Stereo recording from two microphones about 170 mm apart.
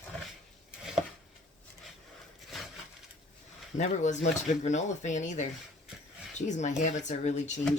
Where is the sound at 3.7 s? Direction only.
45° left (ahead or behind).